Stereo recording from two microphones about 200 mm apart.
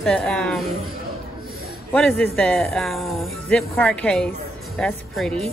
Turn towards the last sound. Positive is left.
turn(degrees=0)  # may be behind; listen again after turning